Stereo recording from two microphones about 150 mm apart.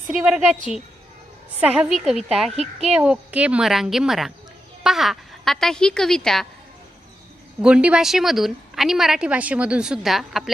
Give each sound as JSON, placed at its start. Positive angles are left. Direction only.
{"t": 0.1, "sound": "a woman's voice", "side_deg": -5}
{"t": 1.6, "sound": "a woman's voice", "side_deg": -10}
{"t": 2.5, "sound": "a child's voice", "side_deg": -45}
{"t": 3.0, "sound": "a woman's voice", "side_deg": -10}
{"t": 7.6, "sound": "a woman's voice", "side_deg": -5}